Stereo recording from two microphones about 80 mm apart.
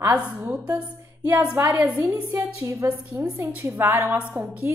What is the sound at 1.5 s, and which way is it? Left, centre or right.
A woman's voice, right.